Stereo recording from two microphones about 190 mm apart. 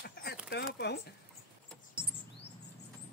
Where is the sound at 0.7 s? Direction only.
60° left (ahead or behind).